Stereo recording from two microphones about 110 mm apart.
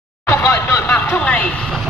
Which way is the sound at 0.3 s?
20° left (ahead or behind).